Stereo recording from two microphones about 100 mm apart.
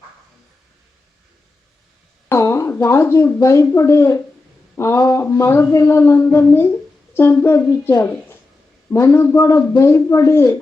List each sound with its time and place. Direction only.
2.3 s a woman's voice: 30° left (ahead or behind)
4.7 s a sound: 25° left (ahead or behind)
4.9 s a woman's voice: 35° left (ahead or behind)